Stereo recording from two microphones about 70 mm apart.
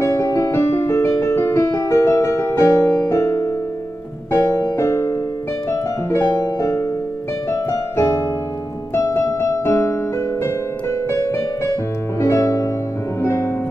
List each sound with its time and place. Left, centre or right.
0.0 s music: left
5.7 s piano: left
7.5 s music: left
8.9 s piano: left
10.4 s music: left